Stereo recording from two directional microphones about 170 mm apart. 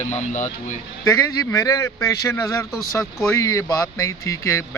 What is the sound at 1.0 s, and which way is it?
Speech, 20° left (ahead or behind).